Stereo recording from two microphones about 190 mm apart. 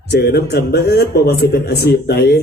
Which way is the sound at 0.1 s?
60° left (ahead or behind).